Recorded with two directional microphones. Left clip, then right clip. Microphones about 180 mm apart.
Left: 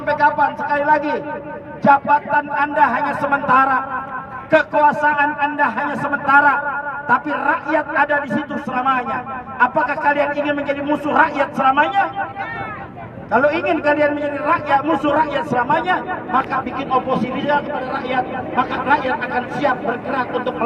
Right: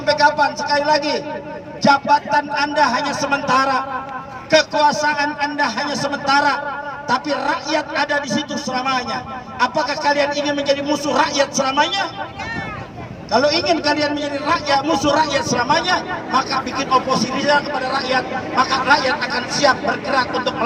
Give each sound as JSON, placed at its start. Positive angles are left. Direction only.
{"t": 0.0, "sound": "a man's voice", "side_deg": -20}
{"t": 4.5, "sound": "a man's voice", "side_deg": -30}
{"t": 13.3, "sound": "a man's voice", "side_deg": -35}